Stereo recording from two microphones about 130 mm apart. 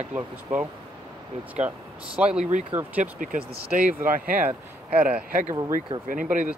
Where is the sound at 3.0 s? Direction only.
90° right.